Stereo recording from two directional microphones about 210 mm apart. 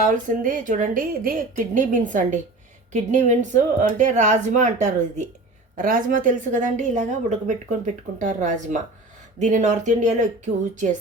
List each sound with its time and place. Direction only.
0.0 s a woman's voice: 40° right (ahead or behind)